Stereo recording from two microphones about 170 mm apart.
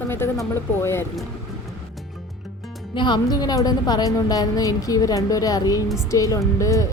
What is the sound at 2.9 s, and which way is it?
A woman's voice, 25° left (ahead or behind).